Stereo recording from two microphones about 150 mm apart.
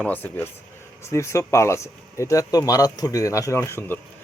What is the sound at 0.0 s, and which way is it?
Speech, 10° left (ahead or behind).